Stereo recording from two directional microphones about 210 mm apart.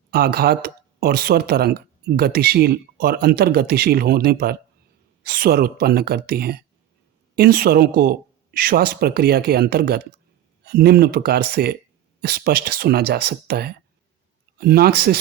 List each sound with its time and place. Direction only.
0.1 s speech: 45° right (ahead or behind)